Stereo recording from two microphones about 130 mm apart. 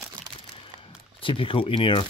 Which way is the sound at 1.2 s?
40° left (ahead or behind).